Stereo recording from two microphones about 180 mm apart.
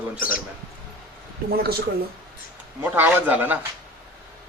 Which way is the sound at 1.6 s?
60° right (ahead or behind).